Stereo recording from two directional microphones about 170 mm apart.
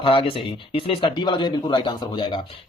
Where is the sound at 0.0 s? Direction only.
30° left (ahead or behind).